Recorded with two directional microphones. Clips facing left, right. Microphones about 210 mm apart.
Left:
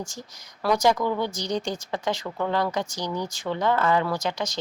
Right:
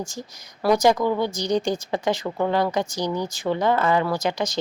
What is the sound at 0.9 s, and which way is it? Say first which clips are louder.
Speech: right 3 dB; 30° right (ahead or behind).